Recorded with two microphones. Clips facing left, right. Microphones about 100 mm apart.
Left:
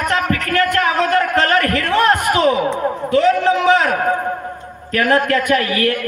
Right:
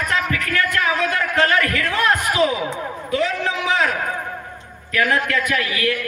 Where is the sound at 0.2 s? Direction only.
45° left (ahead or behind).